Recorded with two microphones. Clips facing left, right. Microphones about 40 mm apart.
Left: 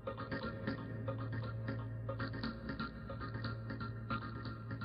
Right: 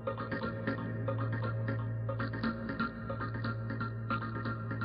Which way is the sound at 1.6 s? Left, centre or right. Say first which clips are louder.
Right 6 dB; centre.